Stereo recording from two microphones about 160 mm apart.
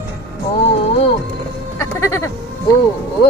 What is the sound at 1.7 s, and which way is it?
Bleat, 20° left (ahead or behind).